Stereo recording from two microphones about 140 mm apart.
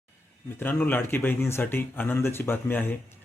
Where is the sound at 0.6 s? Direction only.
15° left (ahead or behind).